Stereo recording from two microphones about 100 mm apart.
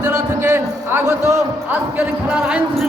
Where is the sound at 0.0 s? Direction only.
25° right (ahead or behind).